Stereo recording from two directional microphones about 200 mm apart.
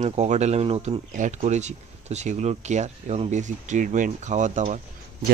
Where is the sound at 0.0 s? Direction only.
35° right (ahead or behind).